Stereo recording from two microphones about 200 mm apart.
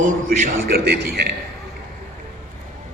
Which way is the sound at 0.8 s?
55° right (ahead or behind).